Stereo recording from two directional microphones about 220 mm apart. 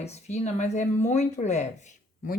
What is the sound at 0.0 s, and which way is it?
Speech, 30° left (ahead or behind).